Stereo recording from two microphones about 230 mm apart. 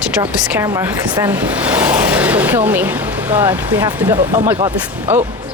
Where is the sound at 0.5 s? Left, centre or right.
Centre.